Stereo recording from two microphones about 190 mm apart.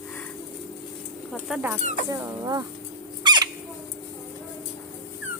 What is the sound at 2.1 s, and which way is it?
Speech, 15° right (ahead or behind).